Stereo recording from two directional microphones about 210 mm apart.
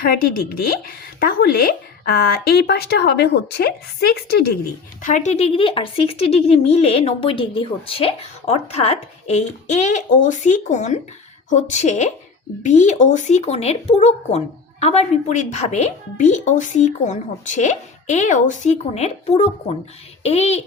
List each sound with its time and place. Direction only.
0.0 s speech: 45° left (ahead or behind)
5.0 s speech: 35° left (ahead or behind)